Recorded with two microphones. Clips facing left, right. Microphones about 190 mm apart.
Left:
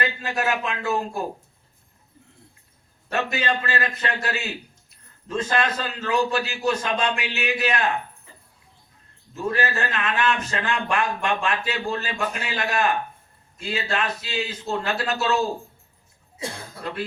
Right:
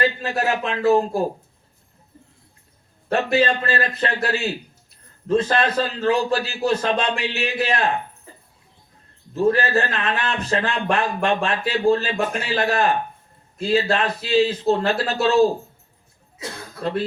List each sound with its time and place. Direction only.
0.0 s a man's voice: 30° right (ahead or behind)
3.1 s a man's voice: 30° right (ahead or behind)
9.3 s a man's voice: 30° right (ahead or behind)